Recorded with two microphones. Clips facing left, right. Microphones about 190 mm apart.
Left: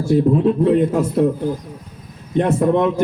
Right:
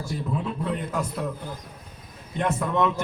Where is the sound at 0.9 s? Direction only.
30° left (ahead or behind).